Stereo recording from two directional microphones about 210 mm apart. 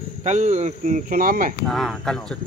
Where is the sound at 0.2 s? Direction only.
35° right (ahead or behind).